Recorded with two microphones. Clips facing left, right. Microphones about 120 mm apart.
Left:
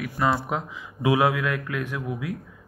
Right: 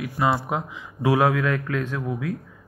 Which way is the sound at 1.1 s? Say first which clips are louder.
Right 2 dB; 10° left (ahead or behind).